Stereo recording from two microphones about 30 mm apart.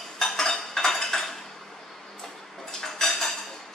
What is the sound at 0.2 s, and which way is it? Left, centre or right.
Cutlery, centre.